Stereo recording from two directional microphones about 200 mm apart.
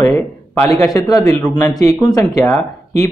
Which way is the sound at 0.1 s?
10° left (ahead or behind).